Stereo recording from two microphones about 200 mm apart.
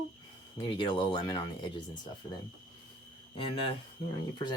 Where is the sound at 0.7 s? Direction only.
25° left (ahead or behind).